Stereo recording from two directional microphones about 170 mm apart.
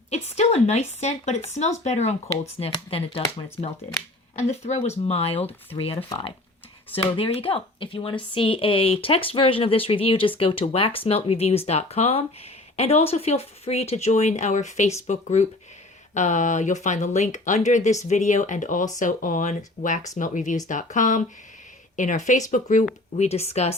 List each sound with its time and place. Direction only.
0.1 s a woman's voice: 40° left (ahead or behind)